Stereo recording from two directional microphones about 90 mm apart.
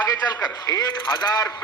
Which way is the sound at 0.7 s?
50° left (ahead or behind).